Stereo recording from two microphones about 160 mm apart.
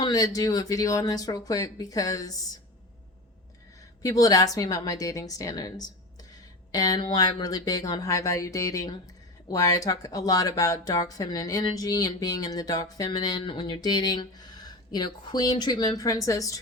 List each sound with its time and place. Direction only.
0.0 s speech: 25° left (ahead or behind)
4.0 s speech: 20° left (ahead or behind)